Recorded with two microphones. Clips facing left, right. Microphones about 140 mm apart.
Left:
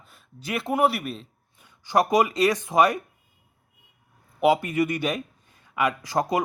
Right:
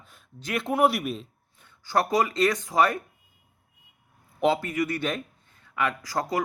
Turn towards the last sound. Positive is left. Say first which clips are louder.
# left 4 dB
turn(degrees=20)  # may be behind; listen again after turning